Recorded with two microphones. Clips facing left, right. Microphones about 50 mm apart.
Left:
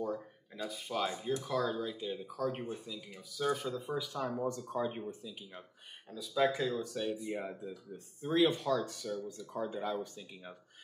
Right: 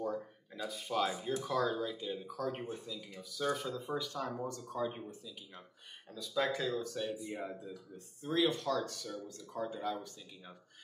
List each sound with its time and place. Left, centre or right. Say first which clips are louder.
0.0 s speech: even; centre
4.5 s speech: left 3 dB; left
6.1 s speech: left 3 dB; centre
7.9 s speech: left 3 dB; left